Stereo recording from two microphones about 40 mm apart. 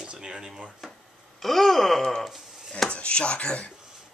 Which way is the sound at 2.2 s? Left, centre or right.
Centre.